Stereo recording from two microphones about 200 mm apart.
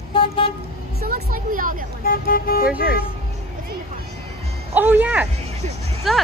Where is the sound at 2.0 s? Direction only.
45° left (ahead or behind).